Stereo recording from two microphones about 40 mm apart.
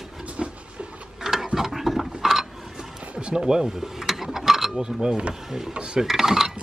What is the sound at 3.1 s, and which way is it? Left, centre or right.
Mechanisms, centre.